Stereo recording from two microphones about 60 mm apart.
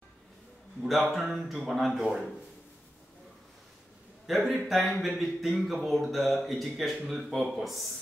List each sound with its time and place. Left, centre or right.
1.1 s a man's voice: centre
4.3 s a man's voice: centre